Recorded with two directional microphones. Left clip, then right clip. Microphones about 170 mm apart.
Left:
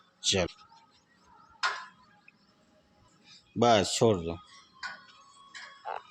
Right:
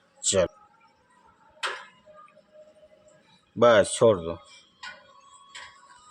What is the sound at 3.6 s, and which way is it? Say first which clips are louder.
Speech: right 5 dB; 15° left (ahead or behind).